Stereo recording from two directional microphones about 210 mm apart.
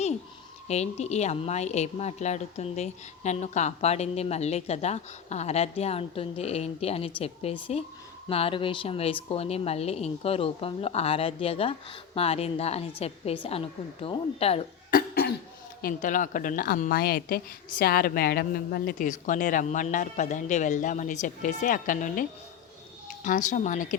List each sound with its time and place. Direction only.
0.7 s a woman's voice: 30° left (ahead or behind)
14.8 s cough: 45° left (ahead or behind)
15.8 s a woman's voice: 40° left (ahead or behind)